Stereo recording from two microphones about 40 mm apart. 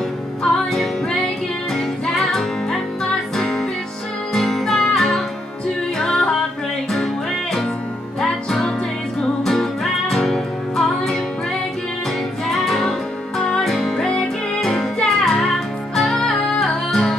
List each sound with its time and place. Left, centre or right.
0.4 s music: centre
2.1 s music: centre
8.2 s music: centre
12.4 s music: centre